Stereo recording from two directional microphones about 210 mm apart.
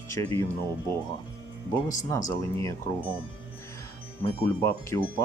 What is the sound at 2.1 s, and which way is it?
Speech, 15° left (ahead or behind).